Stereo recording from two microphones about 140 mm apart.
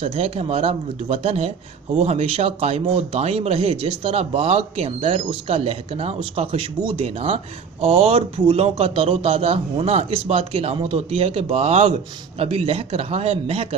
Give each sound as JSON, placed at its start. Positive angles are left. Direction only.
{"t": 0.0, "sound": "speech", "side_deg": -45}